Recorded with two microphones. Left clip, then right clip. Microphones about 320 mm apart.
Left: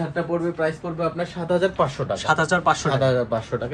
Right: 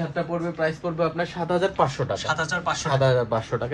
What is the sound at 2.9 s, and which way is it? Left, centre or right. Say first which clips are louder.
Speech: left 1 dB; right.